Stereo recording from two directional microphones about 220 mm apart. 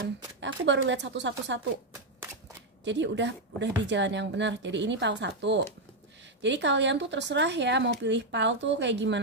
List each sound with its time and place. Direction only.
0.0 s speech: 55° right (ahead or behind)
2.8 s speech: 55° right (ahead or behind)